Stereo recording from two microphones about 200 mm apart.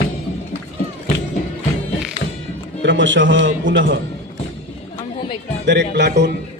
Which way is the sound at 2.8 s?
65° right (ahead or behind).